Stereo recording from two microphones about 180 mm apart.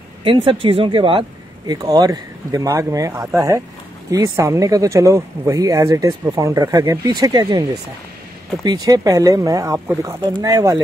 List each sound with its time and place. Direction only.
0.2 s speech: 30° right (ahead or behind)